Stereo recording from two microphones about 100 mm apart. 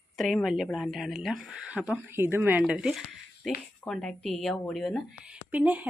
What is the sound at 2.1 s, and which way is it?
A woman's voice, 25° right (ahead or behind).